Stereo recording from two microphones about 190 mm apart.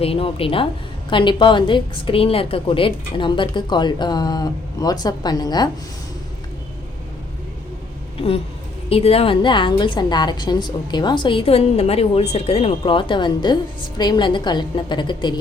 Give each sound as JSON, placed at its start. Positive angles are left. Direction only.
{"t": 0.0, "sound": "a woman's voice", "side_deg": 30}
{"t": 8.9, "sound": "a woman's voice", "side_deg": 30}